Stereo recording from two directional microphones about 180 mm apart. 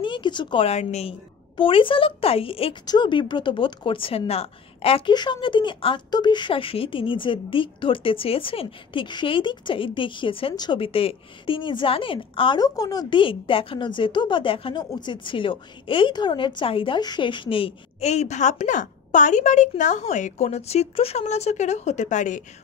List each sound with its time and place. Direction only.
0.0 s speech: 25° left (ahead or behind); by 22.4 s 45° left (ahead or behind)